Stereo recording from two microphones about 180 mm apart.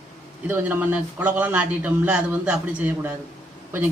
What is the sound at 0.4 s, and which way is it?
Speech, 10° right (ahead or behind).